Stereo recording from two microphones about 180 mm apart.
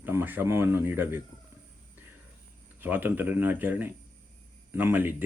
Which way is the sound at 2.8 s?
10° right (ahead or behind).